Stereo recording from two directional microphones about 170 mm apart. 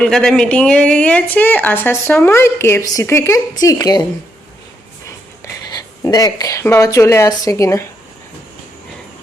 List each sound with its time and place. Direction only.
0.0 s speech: 5° left (ahead or behind); by 4.0 s 20° left (ahead or behind)
5.6 s speech: 20° left (ahead or behind)